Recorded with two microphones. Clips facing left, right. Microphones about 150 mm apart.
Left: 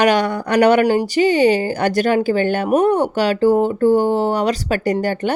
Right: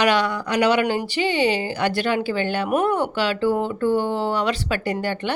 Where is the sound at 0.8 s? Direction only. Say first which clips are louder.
Left 7 dB; 40° left (ahead or behind).